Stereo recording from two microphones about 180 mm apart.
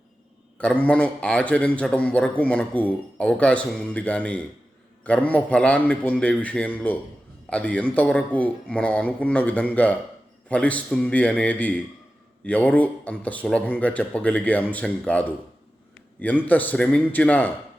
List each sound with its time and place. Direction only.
0.6 s a man's voice: 5° left (ahead or behind)